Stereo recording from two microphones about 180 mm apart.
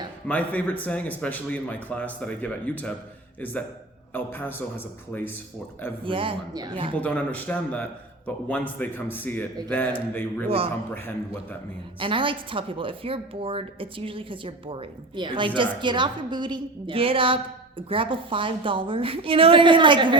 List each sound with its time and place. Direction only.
0.3 s a man's voice: 10° left (ahead or behind)
6.1 s a woman's voice: 30° right (ahead or behind)
6.9 s a man's voice: 10° left (ahead or behind)
11.9 s a woman's voice: 30° right (ahead or behind)